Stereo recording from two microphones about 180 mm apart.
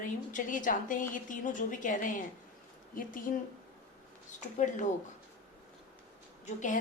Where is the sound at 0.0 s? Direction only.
45° left (ahead or behind).